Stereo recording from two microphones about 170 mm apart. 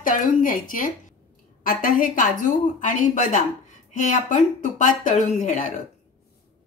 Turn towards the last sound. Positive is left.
turn(degrees=45)  # may be behind; listen again after turning